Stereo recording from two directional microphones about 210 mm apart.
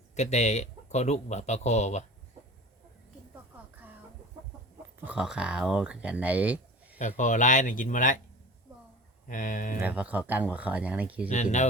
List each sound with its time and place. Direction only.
0.2 s speech: 35° left (ahead or behind)
4.9 s speech: 5° right (ahead or behind)
7.0 s speech: 35° left (ahead or behind)
9.2 s speech: 40° left (ahead or behind)
9.8 s speech: 5° right (ahead or behind)
11.3 s speech: 35° left (ahead or behind)